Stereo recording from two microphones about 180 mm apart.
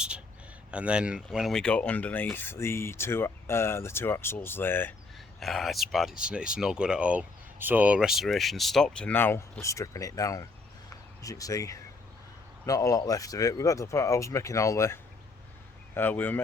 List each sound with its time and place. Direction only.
0.7 s speech: 5° right (ahead or behind); by 4.9 s 10° left (ahead or behind)
5.4 s speech: centre (ahead or behind); by 10.4 s 20° left (ahead or behind)
10.8 s a sound: 20° left (ahead or behind)
12.6 s speech: 20° left (ahead or behind)
16.0 s speech: 10° left (ahead or behind)